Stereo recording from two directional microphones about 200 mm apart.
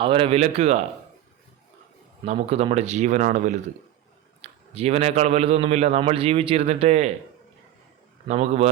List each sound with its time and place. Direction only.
0.0 s a man's voice: 25° right (ahead or behind)
2.2 s a man's voice: 30° right (ahead or behind)
8.3 s a man's voice: 35° right (ahead or behind)